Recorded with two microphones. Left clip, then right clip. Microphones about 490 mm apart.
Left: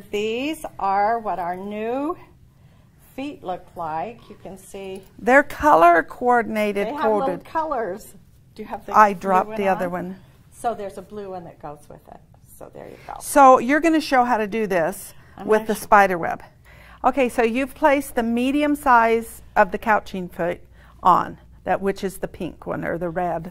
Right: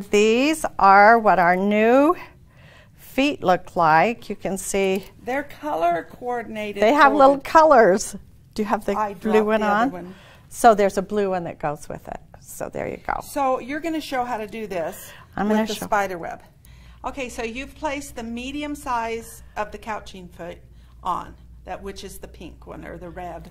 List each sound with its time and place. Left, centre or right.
0.1 s a woman's voice: right
5.2 s a woman's voice: left
6.9 s a woman's voice: right
8.5 s a woman's voice: right
8.9 s a woman's voice: left
10.6 s a woman's voice: right
13.3 s a woman's voice: left
17.0 s a woman's voice: left